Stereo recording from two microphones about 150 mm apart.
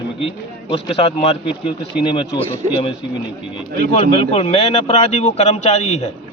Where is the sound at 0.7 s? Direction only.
35° left (ahead or behind).